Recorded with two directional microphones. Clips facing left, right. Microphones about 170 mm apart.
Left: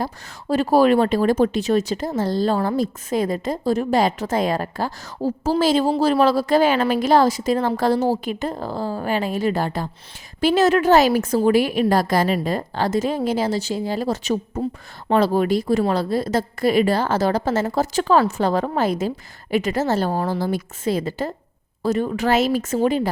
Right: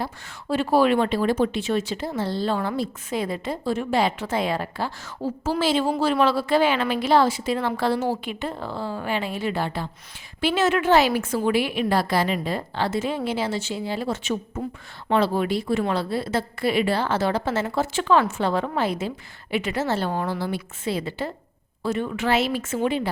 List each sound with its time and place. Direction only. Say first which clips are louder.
0.0 s speech: left 4 dB; 40° left (ahead or behind)